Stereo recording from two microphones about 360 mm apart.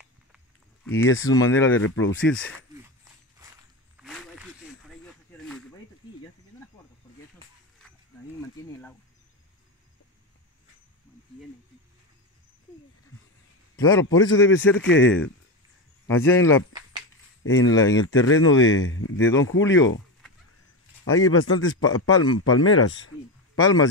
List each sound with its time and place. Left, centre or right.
0.9 s speech: left
3.9 s snake: centre
13.7 s a man's voice: centre
14.2 s speech: left
16.1 s speech: centre
17.4 s a sound: left
17.6 s speech: centre
17.9 s speech: left
21.1 s a man's voice: left